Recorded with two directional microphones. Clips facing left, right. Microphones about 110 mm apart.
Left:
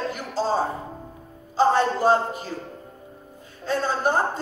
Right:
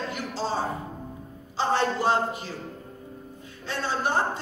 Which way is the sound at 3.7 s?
40° left (ahead or behind).